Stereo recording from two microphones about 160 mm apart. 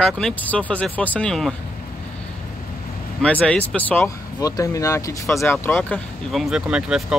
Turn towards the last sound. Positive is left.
turn(degrees=-5)  # may be behind; listen again after turning